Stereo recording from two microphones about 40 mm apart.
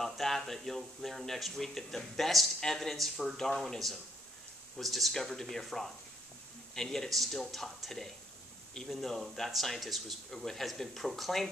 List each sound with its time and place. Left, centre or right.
0.0 s speech: centre